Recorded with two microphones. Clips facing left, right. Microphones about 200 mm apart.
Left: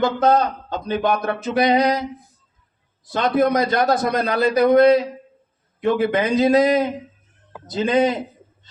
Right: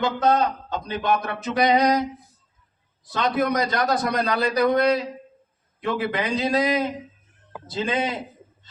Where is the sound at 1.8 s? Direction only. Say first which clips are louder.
Left 1 dB; 25° left (ahead or behind).